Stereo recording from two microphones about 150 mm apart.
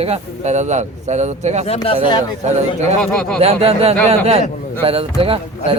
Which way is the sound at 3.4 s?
45° right (ahead or behind).